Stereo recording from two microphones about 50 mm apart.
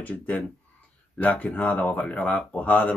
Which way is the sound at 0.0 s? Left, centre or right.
Left.